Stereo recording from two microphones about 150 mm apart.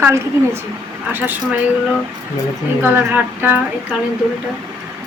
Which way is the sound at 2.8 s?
10° right (ahead or behind).